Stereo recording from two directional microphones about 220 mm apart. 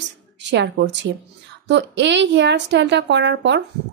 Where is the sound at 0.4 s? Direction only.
50° right (ahead or behind).